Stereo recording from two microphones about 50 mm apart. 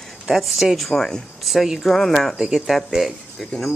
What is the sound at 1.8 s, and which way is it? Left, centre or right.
Speech, centre.